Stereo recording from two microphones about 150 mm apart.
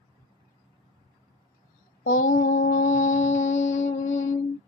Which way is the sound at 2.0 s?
60° left (ahead or behind).